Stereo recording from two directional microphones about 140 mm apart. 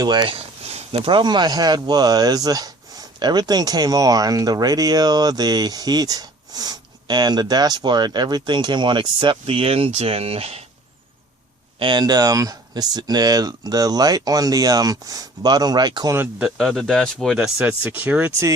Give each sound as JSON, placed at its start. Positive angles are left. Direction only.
{"t": 0.0, "sound": "speech", "side_deg": -30}
{"t": 0.3, "sound": "speech", "side_deg": -45}
{"t": 11.8, "sound": "speech", "side_deg": -30}
{"t": 16.4, "sound": "speech", "side_deg": 0}